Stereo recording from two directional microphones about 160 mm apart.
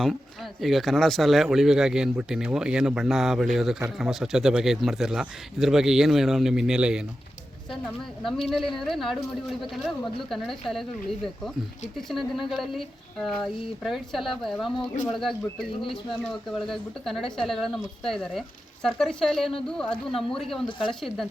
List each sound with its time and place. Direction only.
0.6 s speech: centre (ahead or behind)
8.7 s speech: centre (ahead or behind)
11.9 s speech: centre (ahead or behind)
20.7 s speech: 30° left (ahead or behind)